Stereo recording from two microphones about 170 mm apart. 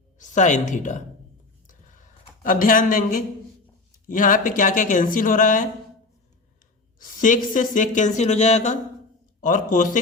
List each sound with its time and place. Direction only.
0.2 s speech: 45° left (ahead or behind)
2.4 s speech: 55° left (ahead or behind)
4.1 s speech: 50° left (ahead or behind)
7.0 s speech: 50° left (ahead or behind)